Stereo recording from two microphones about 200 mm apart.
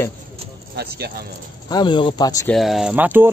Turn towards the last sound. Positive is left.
turn(degrees=-10)  # may be behind; listen again after turning